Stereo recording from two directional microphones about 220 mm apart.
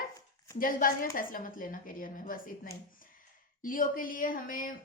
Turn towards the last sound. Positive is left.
turn(degrees=40)  # may be behind; listen again after turning